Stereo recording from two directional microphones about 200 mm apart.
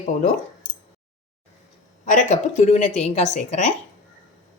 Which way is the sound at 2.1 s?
35° left (ahead or behind).